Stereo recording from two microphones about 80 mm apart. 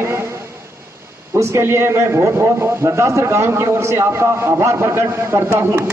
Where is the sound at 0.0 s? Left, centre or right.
Right.